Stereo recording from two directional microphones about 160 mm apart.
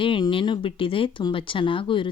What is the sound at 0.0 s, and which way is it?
A woman's voice, 30° left (ahead or behind).